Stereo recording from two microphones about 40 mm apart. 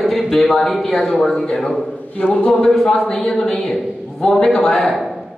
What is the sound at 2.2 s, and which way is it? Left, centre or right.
Speech, left.